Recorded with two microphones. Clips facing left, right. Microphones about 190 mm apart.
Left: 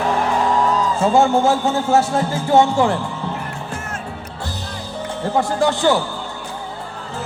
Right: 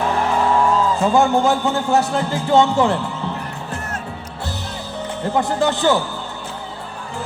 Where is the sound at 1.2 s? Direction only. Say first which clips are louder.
Left 1 dB; 15° right (ahead or behind).